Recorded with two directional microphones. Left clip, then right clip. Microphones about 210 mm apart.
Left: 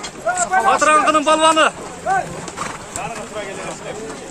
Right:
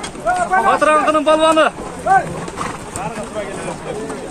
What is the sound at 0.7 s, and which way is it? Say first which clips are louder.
Speech: left 1 dB; 15° left (ahead or behind).